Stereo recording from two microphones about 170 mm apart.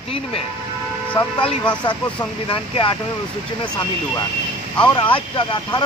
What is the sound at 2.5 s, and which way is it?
Speech, 30° left (ahead or behind).